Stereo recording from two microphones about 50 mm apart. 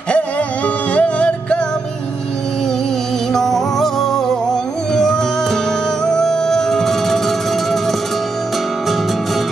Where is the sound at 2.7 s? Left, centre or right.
Centre.